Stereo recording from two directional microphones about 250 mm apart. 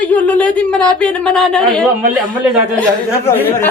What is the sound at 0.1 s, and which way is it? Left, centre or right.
Speech, centre.